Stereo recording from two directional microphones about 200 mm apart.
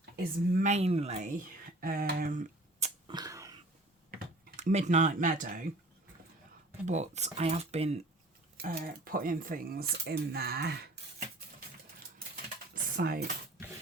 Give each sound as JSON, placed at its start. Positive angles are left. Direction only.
{"t": 0.5, "sound": "speech", "side_deg": -35}
{"t": 3.1, "sound": "a sound", "side_deg": -20}
{"t": 4.1, "sound": "speech", "side_deg": -35}
{"t": 6.8, "sound": "speech", "side_deg": -35}
{"t": 8.5, "sound": "speech", "side_deg": -45}
{"t": 12.7, "sound": "typing", "side_deg": -50}